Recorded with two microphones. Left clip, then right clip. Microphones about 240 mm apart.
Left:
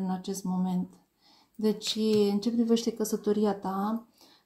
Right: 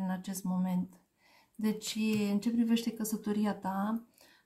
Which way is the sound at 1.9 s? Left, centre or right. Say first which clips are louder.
Left 10 dB; right.